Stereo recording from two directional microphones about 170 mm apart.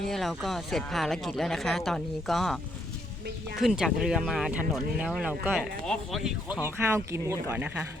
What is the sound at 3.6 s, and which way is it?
Speech, centre (ahead or behind).